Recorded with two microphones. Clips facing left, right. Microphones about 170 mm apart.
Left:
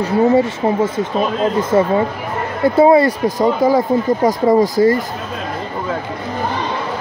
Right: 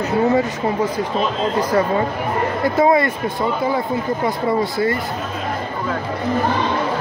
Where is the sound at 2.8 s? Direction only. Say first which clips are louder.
Left 6 dB; 30° left (ahead or behind).